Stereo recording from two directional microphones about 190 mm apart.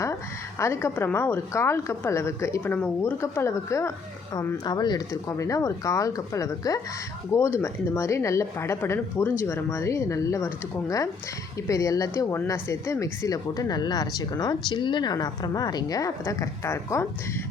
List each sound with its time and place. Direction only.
0.6 s a woman's voice: 15° left (ahead or behind)